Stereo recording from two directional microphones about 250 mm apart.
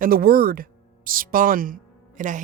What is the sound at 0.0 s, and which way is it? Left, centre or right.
Speech, right.